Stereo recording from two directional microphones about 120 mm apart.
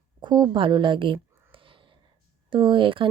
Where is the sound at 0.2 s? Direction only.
35° right (ahead or behind).